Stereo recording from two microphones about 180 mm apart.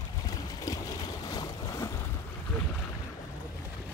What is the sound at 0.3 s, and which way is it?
Boat, 20° left (ahead or behind).